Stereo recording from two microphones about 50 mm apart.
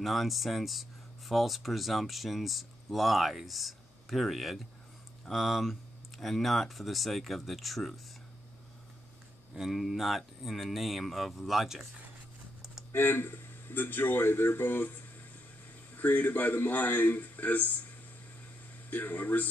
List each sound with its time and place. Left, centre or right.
0.0 s speech: centre
9.6 s speech: centre
12.9 s a man's voice: left
18.9 s a man's voice: left